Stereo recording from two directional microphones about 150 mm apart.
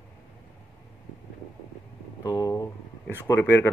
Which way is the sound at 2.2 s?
25° left (ahead or behind).